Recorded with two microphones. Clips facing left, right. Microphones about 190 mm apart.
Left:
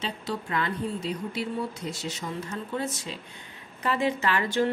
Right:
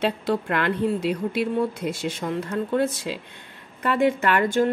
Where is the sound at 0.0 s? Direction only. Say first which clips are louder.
Right 9 dB; 60° right (ahead or behind).